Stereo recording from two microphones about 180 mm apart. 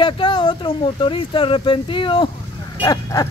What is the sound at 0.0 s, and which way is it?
Speech, 25° left (ahead or behind).